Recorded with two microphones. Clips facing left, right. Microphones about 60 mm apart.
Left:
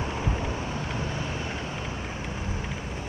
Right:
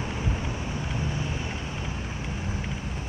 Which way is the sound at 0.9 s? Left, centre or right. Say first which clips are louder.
Even; left.